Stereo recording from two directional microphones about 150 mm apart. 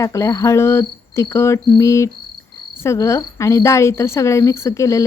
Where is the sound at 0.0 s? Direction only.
20° left (ahead or behind).